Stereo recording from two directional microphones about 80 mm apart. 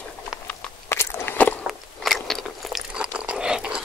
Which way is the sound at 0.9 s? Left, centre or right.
Left.